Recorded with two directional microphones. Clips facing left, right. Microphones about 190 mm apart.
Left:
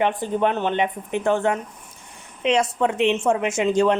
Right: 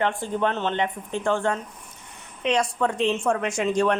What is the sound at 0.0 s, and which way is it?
Speech, 20° left (ahead or behind).